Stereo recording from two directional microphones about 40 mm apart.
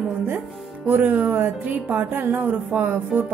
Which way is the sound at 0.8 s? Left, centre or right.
Right.